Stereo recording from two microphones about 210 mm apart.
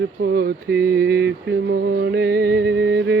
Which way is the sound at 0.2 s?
50° right (ahead or behind).